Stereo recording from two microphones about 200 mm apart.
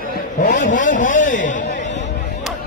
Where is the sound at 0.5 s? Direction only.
40° left (ahead or behind).